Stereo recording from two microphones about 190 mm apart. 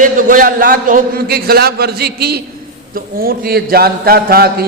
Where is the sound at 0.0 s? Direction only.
45° right (ahead or behind).